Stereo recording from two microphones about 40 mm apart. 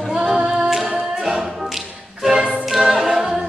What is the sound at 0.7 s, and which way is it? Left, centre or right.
Singing, centre.